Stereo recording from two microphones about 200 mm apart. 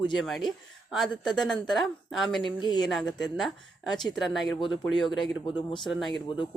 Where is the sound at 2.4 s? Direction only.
25° left (ahead or behind).